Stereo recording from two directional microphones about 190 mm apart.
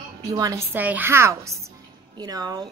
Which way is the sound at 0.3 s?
20° right (ahead or behind).